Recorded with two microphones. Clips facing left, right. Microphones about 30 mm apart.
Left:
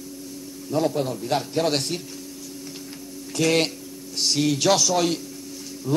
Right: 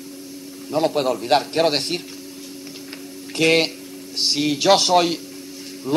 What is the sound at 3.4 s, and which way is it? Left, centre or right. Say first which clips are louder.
Speech: right 4 dB; right.